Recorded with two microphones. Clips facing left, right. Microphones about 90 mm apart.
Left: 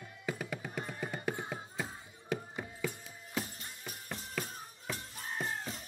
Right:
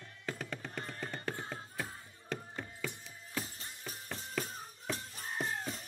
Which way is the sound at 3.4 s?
30° right (ahead or behind).